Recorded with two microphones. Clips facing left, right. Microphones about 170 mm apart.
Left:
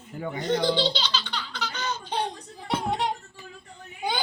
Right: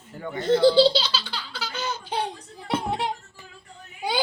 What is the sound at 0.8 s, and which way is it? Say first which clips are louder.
Baby laughter: right 8 dB; 5° right (ahead or behind).